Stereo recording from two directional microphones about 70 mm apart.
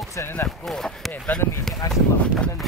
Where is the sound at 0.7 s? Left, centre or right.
Centre.